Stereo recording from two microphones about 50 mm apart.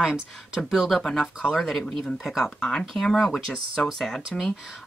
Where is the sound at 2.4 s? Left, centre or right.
Centre.